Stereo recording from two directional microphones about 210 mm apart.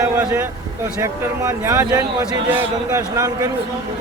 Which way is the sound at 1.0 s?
15° right (ahead or behind).